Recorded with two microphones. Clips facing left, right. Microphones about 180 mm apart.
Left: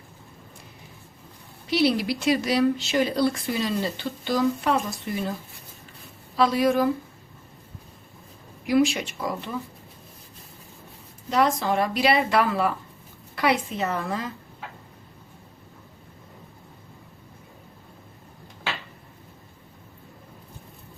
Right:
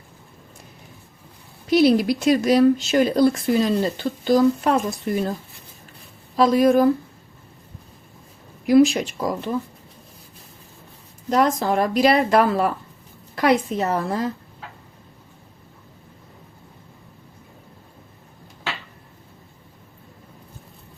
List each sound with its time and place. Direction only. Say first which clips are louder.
1.7 s speech: right 6 dB; 45° right (ahead or behind)
6.3 s speech: right 5 dB; 45° right (ahead or behind)
8.6 s speech: right 6 dB; 45° right (ahead or behind)
11.3 s a woman's voice: right 3 dB; 45° right (ahead or behind)